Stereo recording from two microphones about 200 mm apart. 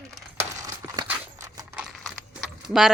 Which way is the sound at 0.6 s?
15° right (ahead or behind).